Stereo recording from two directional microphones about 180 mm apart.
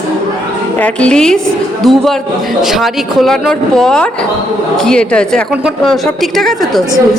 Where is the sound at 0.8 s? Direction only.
5° left (ahead or behind).